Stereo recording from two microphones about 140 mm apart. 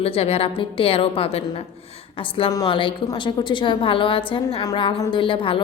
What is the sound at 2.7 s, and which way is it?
A woman's voice, 35° left (ahead or behind).